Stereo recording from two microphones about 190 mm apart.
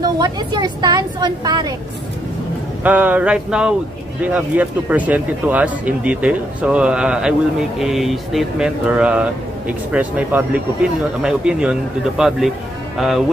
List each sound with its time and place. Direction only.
0.0 s a woman's voice: 20° right (ahead or behind)
2.8 s speech: 10° right (ahead or behind)